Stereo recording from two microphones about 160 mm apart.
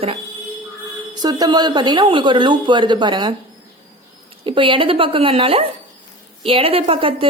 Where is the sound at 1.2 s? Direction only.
25° right (ahead or behind).